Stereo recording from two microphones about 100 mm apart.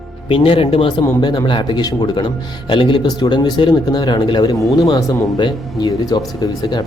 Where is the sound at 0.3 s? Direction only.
60° left (ahead or behind).